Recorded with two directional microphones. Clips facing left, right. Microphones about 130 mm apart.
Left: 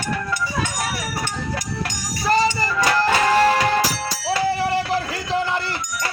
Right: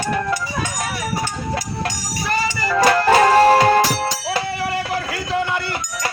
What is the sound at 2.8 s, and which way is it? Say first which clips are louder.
Music: right 5 dB; 45° right (ahead or behind).